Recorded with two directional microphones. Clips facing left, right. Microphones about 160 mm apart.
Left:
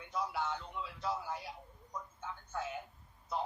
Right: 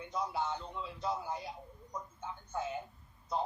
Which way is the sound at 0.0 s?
20° right (ahead or behind).